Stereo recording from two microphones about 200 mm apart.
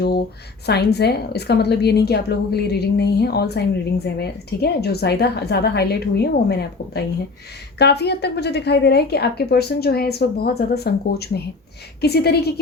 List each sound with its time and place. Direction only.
0.0 s a woman's voice: 55° left (ahead or behind)